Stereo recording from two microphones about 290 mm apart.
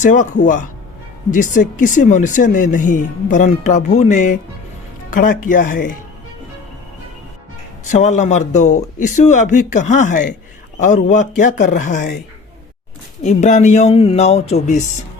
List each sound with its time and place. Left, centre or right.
0.0 s speech: left
7.9 s speech: left
13.2 s speech: left